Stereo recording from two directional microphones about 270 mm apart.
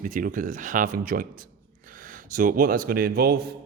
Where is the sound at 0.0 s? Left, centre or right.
Right.